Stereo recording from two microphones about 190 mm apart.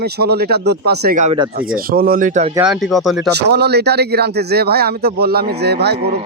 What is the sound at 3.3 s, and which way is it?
Speech, 60° right (ahead or behind).